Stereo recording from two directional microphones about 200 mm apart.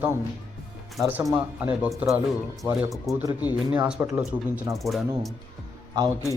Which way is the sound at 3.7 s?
5° right (ahead or behind).